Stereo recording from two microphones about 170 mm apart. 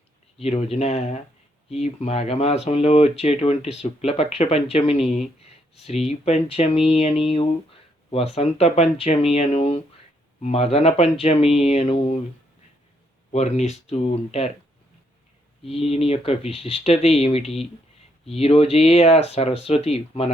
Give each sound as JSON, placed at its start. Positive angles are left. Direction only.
{"t": 0.3, "sound": "speech", "side_deg": 35}
{"t": 13.3, "sound": "speech", "side_deg": 40}
{"t": 15.7, "sound": "speech", "side_deg": 35}